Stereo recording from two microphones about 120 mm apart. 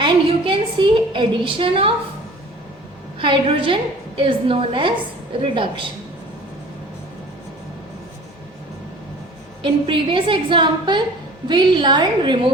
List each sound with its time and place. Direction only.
0.0 s a woman's voice: 45° right (ahead or behind)
3.2 s a woman's voice: 45° right (ahead or behind)
9.6 s a woman's voice: 45° right (ahead or behind)